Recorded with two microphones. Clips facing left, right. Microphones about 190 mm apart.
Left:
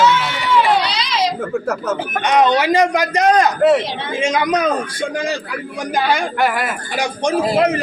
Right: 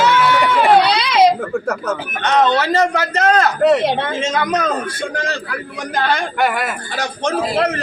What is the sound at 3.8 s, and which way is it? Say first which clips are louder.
Speech: right 8 dB; 55° right (ahead or behind).